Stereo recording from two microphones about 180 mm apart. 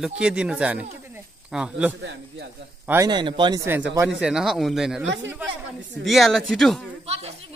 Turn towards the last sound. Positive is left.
turn(degrees=-35)  # may be behind; listen again after turning